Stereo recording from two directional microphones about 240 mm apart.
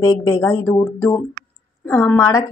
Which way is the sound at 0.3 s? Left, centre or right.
Centre.